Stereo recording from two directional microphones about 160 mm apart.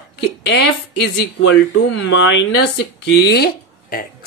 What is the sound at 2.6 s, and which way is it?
Speech, 90° left.